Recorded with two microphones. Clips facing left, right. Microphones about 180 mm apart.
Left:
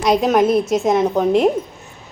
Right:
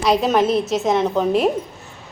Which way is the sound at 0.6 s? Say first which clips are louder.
Left 3 dB; 5° right (ahead or behind).